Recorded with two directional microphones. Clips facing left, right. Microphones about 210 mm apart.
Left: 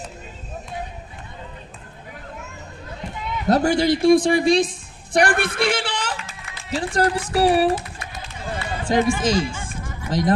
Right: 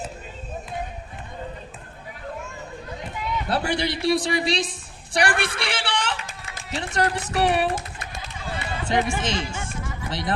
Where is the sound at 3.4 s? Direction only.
45° left (ahead or behind).